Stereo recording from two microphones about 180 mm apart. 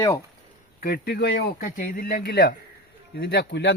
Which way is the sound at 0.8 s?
55° left (ahead or behind).